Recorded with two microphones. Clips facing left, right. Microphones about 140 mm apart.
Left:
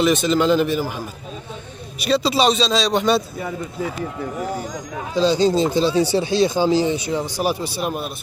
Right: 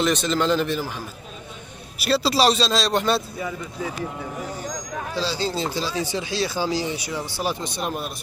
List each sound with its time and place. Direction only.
0.0 s speech: 5° left (ahead or behind)
2.0 s speech: 5° right (ahead or behind)
5.1 s speech: 20° left (ahead or behind)